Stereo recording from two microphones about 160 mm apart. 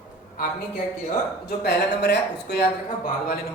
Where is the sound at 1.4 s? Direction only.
90° left.